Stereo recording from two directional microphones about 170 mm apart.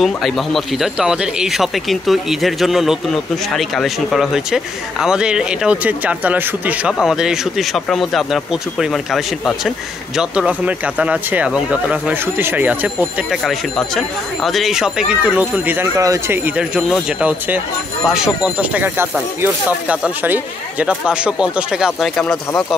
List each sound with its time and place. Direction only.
0.0 s speech: centre (ahead or behind)